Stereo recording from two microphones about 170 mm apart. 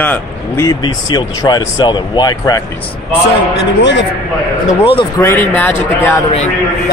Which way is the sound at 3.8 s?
90° left.